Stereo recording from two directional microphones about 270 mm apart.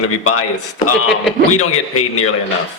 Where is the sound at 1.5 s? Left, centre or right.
Left.